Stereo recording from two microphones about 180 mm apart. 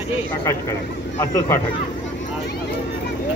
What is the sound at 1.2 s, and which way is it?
Speech, 15° left (ahead or behind).